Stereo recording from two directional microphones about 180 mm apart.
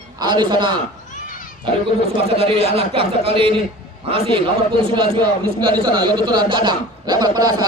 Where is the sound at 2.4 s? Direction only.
35° right (ahead or behind).